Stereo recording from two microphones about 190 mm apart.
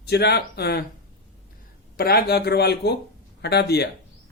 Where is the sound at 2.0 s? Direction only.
55° left (ahead or behind).